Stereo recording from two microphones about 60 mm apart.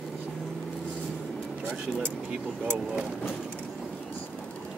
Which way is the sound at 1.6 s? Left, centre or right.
Centre.